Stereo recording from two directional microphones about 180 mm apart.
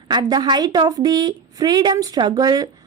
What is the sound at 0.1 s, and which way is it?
A woman's voice, 20° right (ahead or behind).